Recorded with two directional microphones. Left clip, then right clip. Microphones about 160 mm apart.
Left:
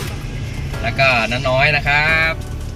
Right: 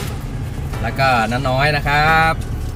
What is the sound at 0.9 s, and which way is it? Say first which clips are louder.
Speech: left 1 dB; 15° right (ahead or behind).